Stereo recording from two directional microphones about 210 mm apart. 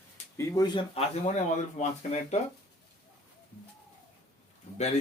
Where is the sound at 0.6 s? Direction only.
20° left (ahead or behind).